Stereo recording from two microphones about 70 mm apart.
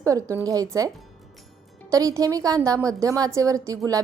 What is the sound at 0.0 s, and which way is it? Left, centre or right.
Speech, right.